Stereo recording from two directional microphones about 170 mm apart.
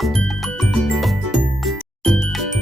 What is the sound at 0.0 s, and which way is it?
Music, centre (ahead or behind).